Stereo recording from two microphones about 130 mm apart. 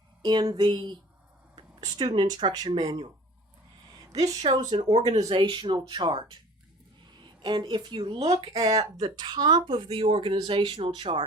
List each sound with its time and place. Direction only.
0.2 s speech: 35° right (ahead or behind)
4.1 s speech: 55° right (ahead or behind)
5.3 s speech: 40° right (ahead or behind)
7.4 s speech: 35° right (ahead or behind); by 8.7 s 55° right (ahead or behind)
9.0 s speech: 30° right (ahead or behind)